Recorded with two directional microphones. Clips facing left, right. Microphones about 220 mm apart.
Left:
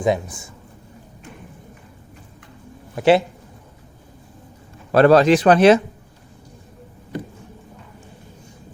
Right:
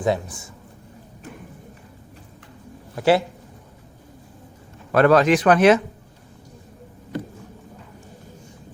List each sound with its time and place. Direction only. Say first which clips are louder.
0.0 s speech: left 2 dB; 15° left (ahead or behind)
2.9 s speech: left 3 dB; 20° left (ahead or behind)
4.9 s speech: left 3 dB; 30° left (ahead or behind)